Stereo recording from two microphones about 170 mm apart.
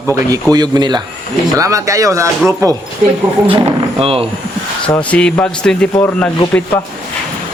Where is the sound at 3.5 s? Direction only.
30° right (ahead or behind).